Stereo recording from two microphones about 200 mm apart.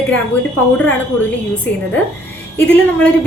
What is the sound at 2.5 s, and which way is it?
Speech, 10° left (ahead or behind).